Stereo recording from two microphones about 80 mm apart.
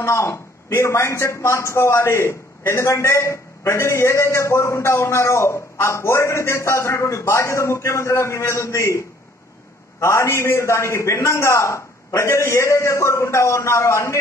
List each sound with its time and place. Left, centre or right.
0.0 s a man's voice: left